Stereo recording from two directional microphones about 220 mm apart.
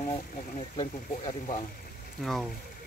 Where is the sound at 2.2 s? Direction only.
Centre (ahead or behind).